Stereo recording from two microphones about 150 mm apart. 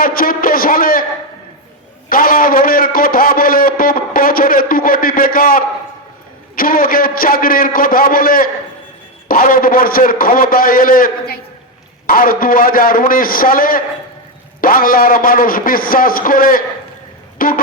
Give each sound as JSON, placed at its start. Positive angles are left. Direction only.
{"t": 0.0, "sound": "a man's voice", "side_deg": 70}
{"t": 2.0, "sound": "a man's voice", "side_deg": 70}